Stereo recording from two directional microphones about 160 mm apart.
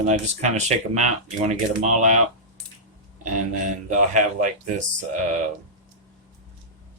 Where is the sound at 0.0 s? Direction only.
45° right (ahead or behind).